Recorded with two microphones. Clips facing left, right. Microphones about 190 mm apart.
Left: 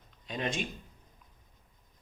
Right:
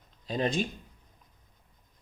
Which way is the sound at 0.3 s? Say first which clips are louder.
Right 6 dB; 35° right (ahead or behind).